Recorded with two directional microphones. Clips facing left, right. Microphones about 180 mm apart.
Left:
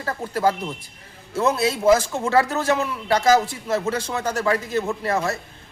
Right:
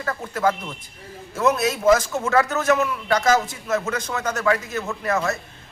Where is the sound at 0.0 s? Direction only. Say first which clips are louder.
Left 1 dB; 30° left (ahead or behind).